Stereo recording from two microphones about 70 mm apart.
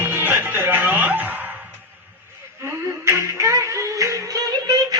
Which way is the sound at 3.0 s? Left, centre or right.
Right.